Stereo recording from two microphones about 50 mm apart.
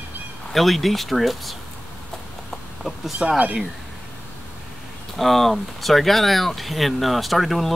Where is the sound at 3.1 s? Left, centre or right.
Centre.